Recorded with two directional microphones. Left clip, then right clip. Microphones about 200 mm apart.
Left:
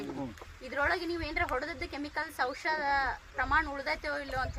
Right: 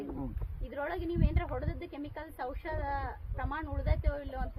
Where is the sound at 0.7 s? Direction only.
5° left (ahead or behind).